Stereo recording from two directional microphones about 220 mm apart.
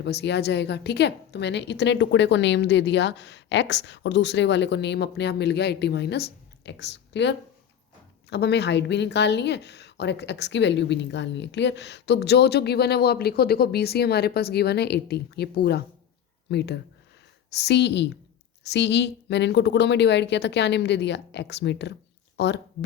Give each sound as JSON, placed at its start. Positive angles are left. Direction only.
{"t": 0.0, "sound": "speech", "side_deg": 50}